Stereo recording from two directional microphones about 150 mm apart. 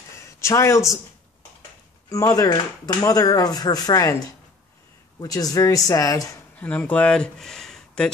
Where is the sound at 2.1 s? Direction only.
20° left (ahead or behind).